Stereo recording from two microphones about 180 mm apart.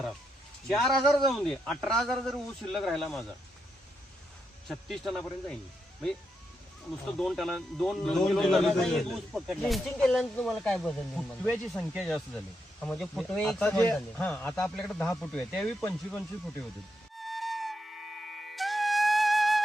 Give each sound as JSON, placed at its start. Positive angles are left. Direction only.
{"t": 0.7, "sound": "a man's voice", "side_deg": 0}
{"t": 4.7, "sound": "a man's voice", "side_deg": 0}
{"t": 7.2, "sound": "a man's voice", "side_deg": 0}
{"t": 17.2, "sound": "flute", "side_deg": 0}